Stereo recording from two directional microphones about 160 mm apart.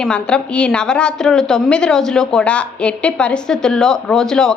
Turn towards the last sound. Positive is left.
turn(degrees=5)  # may be behind; listen again after turning